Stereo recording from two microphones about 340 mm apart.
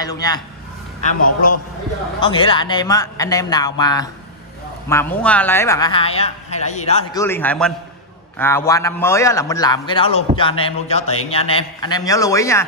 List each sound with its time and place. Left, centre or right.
0.0 s a man's voice: centre
1.0 s a man's voice: left
2.1 s a man's voice: centre